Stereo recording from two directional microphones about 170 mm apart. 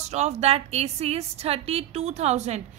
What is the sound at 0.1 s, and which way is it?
A woman's voice, 40° right (ahead or behind).